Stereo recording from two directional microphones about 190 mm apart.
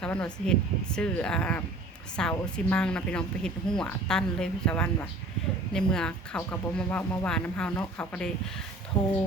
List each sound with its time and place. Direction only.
0.0 s a woman's voice: 5° left (ahead or behind)